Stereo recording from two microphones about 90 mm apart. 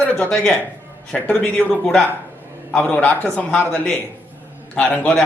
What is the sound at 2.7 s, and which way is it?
A man's voice, 10° left (ahead or behind).